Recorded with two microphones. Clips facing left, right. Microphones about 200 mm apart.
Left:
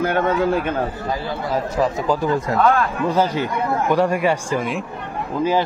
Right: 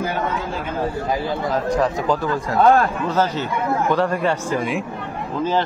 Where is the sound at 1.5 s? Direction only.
10° left (ahead or behind).